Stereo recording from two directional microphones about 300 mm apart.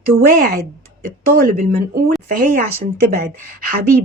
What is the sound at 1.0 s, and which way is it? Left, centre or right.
A woman's voice, right.